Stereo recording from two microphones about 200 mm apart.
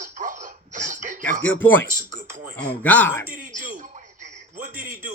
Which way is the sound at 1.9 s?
40° right (ahead or behind).